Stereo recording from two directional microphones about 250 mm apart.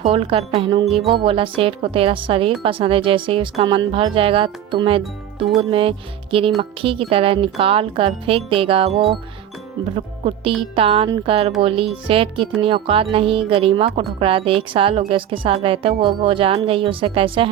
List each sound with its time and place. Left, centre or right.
0.0 s a woman's voice: right